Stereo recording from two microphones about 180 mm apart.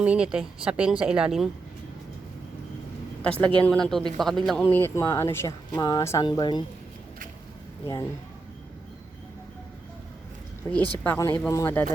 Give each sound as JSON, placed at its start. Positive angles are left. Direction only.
{"t": 0.0, "sound": "speech", "side_deg": -5}
{"t": 3.2, "sound": "speech", "side_deg": 10}
{"t": 4.6, "sound": "speech", "side_deg": 15}
{"t": 10.7, "sound": "speech", "side_deg": 10}